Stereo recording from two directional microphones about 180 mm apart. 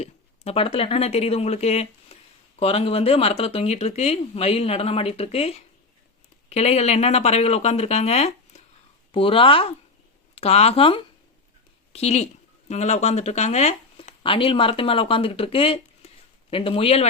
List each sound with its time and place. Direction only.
0.0 s speech: 35° left (ahead or behind)